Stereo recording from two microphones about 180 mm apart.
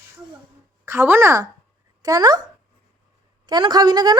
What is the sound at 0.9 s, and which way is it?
A woman's voice, 10° right (ahead or behind).